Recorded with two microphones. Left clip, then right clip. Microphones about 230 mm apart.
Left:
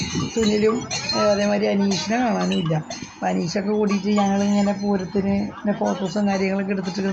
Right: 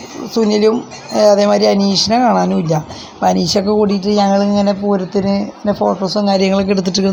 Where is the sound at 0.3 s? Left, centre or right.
Right.